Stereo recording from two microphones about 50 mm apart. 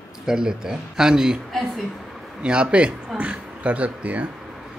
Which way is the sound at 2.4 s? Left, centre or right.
Right.